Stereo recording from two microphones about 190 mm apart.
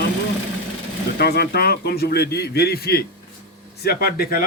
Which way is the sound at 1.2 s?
55° left (ahead or behind).